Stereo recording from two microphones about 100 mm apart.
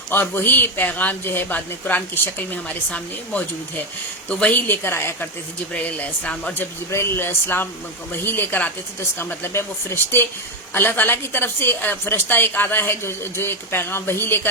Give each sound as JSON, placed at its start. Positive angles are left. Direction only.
{"t": 0.1, "sound": "a man's voice", "side_deg": 20}
{"t": 5.7, "sound": "a man's voice", "side_deg": 10}